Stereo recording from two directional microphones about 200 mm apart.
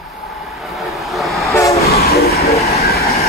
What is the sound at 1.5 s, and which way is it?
Train, 15° left (ahead or behind).